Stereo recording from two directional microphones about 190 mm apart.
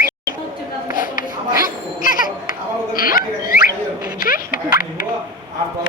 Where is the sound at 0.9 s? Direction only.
45° left (ahead or behind).